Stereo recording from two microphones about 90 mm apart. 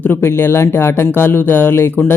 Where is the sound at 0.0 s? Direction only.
25° left (ahead or behind).